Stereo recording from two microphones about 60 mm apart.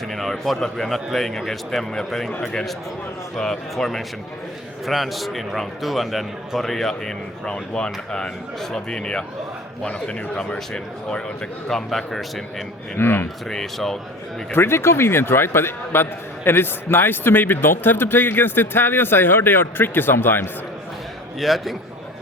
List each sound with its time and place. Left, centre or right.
0.1 s a man's voice: centre
11.7 s a man's voice: centre
13.0 s a man's voice: left
13.5 s speech: centre
14.5 s a man's voice: left
21.3 s a man's voice: centre